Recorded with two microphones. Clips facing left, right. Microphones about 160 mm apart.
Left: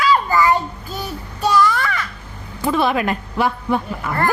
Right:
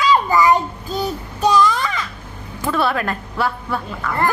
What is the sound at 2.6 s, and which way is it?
A woman's voice, 15° left (ahead or behind).